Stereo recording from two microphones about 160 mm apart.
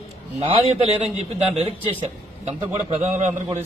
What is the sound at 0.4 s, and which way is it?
A man's voice, 40° right (ahead or behind).